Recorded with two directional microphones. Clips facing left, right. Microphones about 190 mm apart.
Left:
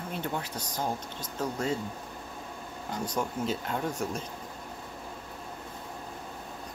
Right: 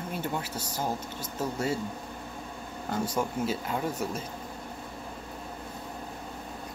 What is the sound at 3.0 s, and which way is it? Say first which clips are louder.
Speech: left 1 dB; 5° right (ahead or behind).